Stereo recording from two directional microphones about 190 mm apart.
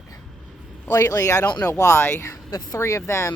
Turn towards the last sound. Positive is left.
turn(degrees=15)  # may be behind; listen again after turning